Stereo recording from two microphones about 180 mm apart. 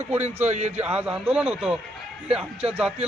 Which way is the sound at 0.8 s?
5° right (ahead or behind).